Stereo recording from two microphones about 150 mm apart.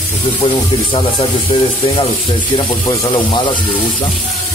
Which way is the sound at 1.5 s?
40° left (ahead or behind).